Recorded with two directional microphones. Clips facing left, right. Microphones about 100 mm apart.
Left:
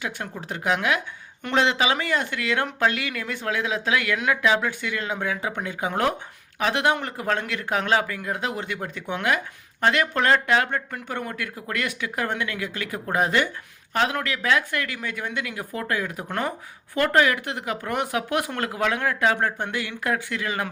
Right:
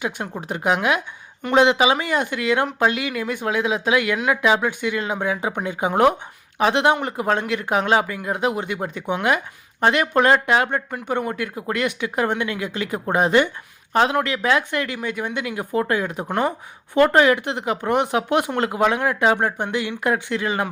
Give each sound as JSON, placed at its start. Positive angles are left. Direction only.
{"t": 0.4, "sound": "speech", "side_deg": -20}